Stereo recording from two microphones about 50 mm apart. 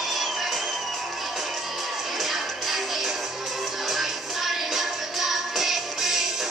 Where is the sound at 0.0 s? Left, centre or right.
Centre.